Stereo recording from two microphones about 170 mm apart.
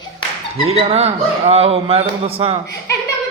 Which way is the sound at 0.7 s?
35° right (ahead or behind).